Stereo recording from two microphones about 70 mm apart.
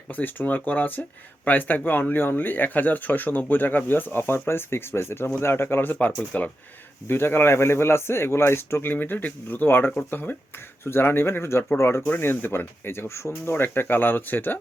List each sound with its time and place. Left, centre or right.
0.1 s speech: left
8.9 s speech: left
13.3 s speech: left